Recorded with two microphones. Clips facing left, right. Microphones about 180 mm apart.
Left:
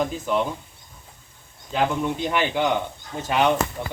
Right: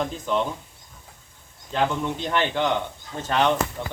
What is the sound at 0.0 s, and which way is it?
Speech, 5° left (ahead or behind).